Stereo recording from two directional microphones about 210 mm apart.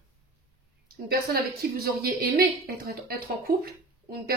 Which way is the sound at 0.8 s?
45° right (ahead or behind).